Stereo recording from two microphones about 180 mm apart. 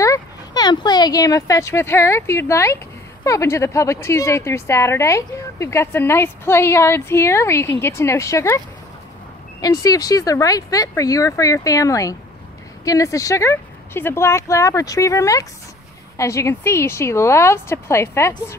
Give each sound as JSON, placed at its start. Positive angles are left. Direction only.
{"t": 0.0, "sound": "a woman's voice", "side_deg": 20}